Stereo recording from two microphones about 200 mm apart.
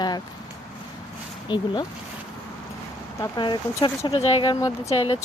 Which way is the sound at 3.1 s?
15° left (ahead or behind).